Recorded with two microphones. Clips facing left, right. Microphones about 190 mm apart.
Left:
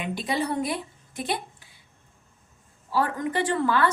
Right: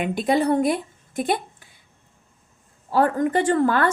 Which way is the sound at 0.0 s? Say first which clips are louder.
Right 7 dB; 55° right (ahead or behind).